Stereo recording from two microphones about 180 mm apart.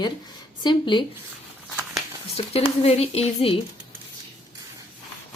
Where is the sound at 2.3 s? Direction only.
35° left (ahead or behind).